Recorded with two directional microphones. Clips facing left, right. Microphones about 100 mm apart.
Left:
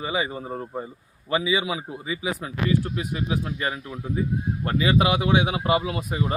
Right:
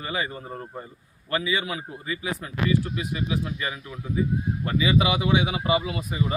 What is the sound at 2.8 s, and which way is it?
Speech, 40° left (ahead or behind).